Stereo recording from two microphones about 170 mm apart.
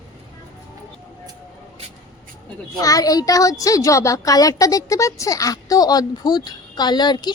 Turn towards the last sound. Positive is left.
turn(degrees=25)  # may be behind; listen again after turning